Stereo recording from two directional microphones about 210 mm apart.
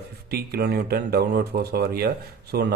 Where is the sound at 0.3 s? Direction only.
45° right (ahead or behind).